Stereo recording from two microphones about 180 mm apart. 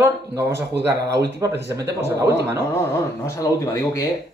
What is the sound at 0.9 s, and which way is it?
Speech, 70° right (ahead or behind).